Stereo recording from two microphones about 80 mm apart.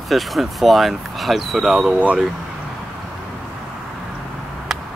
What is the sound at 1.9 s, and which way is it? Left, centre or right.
Speech, centre.